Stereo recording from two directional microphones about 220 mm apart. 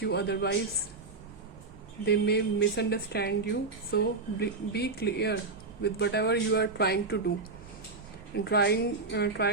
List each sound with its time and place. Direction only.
0.0 s a woman's voice: 50° left (ahead or behind)
2.0 s a woman's voice: 50° left (ahead or behind)
8.4 s a woman's voice: 50° left (ahead or behind)